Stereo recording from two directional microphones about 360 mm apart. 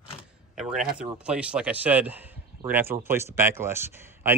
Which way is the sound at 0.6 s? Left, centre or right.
Centre.